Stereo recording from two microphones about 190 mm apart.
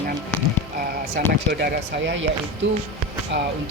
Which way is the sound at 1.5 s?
65° right (ahead or behind).